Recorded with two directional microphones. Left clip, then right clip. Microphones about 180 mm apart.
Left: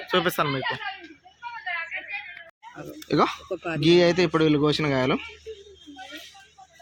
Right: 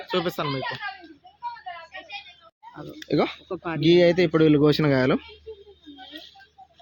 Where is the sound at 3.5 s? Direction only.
20° right (ahead or behind).